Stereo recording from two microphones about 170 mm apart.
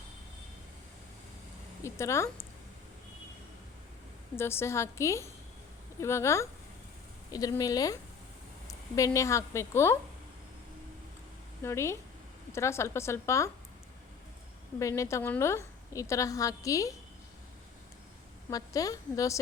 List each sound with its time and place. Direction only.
1.8 s a woman's voice: 15° left (ahead or behind)
4.4 s a woman's voice: 15° left (ahead or behind)
9.0 s a woman's voice: 20° left (ahead or behind)
11.6 s a woman's voice: 15° left (ahead or behind)
14.8 s a woman's voice: 20° left (ahead or behind)
18.5 s a woman's voice: 20° left (ahead or behind)